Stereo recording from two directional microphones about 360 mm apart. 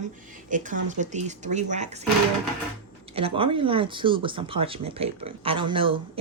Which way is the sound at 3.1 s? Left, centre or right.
Centre.